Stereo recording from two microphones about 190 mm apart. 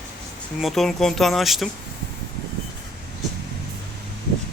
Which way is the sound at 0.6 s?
Centre (ahead or behind).